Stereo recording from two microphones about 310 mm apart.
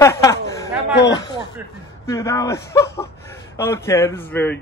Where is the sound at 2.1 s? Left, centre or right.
Centre.